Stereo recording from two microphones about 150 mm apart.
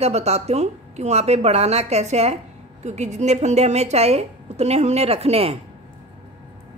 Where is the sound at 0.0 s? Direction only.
45° right (ahead or behind).